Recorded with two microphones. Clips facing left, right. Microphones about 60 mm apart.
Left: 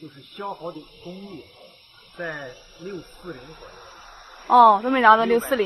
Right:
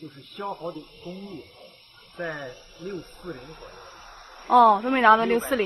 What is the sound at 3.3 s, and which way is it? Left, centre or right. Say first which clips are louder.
Snake: even; centre.